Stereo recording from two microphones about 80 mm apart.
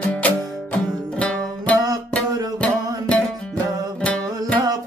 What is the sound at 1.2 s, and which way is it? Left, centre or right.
Music, centre.